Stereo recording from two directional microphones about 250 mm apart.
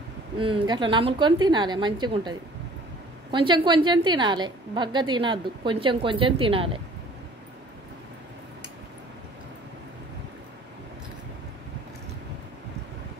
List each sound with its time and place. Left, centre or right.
0.4 s a woman's voice: centre